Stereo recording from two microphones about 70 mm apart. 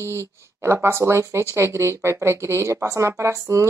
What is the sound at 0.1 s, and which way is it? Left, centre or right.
Speech, right.